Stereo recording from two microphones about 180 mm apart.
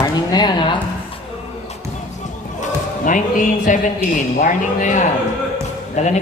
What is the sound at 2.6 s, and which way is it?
Speech, 45° left (ahead or behind).